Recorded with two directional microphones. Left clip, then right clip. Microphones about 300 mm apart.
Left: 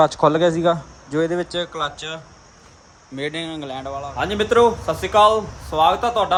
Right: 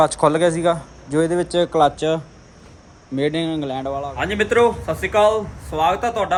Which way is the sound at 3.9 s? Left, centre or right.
Right.